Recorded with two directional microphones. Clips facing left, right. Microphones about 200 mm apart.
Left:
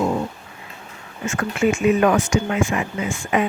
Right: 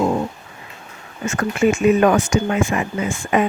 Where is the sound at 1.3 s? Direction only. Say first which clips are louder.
Right 2 dB; 40° right (ahead or behind).